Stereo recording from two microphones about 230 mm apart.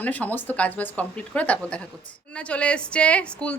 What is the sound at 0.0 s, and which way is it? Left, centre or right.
A woman's voice, centre.